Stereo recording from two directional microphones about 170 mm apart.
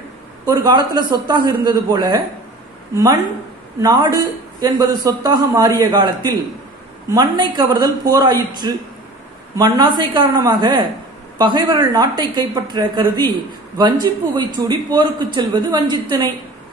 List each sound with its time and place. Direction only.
0.7 s a man's voice: 25° right (ahead or behind)
3.8 s a man's voice: 25° right (ahead or behind)